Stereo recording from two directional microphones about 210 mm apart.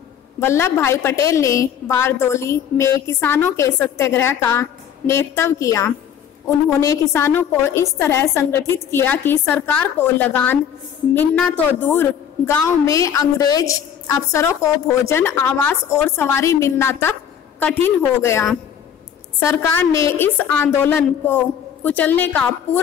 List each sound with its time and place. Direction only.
0.4 s a woman's voice: 10° left (ahead or behind)